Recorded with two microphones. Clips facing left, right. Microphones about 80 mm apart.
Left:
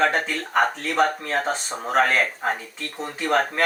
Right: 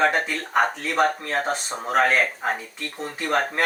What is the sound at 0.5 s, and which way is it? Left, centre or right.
Speech, centre.